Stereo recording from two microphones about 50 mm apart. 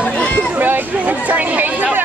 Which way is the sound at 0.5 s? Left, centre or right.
Right.